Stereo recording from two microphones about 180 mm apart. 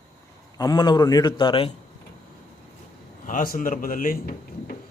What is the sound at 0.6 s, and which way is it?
A man's voice, 20° left (ahead or behind).